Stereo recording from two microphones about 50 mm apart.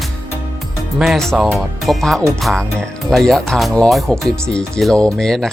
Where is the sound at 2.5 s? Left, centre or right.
Centre.